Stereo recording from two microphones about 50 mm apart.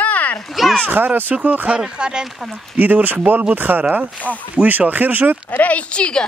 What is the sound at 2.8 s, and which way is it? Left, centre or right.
Speech, right.